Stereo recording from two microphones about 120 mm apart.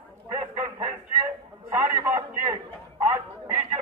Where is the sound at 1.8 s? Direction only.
15° right (ahead or behind).